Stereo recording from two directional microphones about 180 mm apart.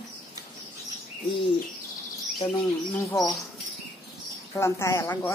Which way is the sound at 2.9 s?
15° left (ahead or behind).